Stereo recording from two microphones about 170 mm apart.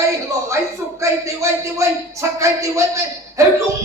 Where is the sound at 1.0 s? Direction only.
15° right (ahead or behind).